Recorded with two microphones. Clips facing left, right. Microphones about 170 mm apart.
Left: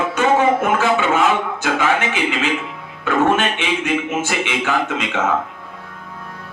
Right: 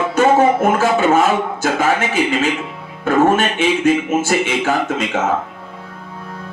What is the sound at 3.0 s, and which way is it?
A man's voice, 45° right (ahead or behind).